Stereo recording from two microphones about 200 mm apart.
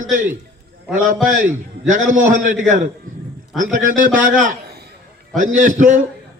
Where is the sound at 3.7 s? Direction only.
40° right (ahead or behind).